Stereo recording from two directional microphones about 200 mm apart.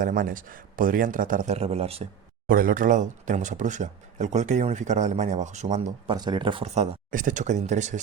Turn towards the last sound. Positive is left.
turn(degrees=-35)  # may be behind; listen again after turning